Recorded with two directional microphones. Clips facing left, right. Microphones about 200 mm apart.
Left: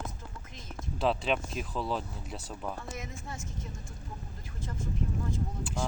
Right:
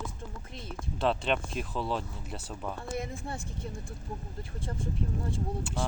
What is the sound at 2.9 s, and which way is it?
A woman's voice, 30° right (ahead or behind).